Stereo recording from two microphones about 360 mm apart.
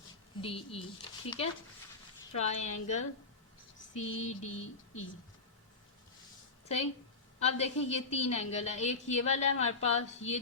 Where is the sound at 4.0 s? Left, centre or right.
Left.